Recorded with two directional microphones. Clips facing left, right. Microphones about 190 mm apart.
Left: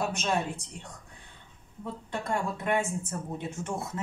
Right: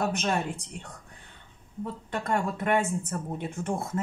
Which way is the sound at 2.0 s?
55° right (ahead or behind).